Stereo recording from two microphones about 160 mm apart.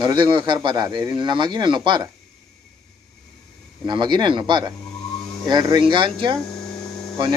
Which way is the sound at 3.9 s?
30° right (ahead or behind).